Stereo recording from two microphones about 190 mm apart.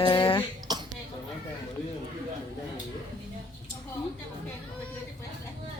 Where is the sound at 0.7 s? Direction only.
20° right (ahead or behind).